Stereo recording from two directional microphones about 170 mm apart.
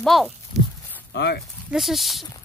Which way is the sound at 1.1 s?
75° left (ahead or behind).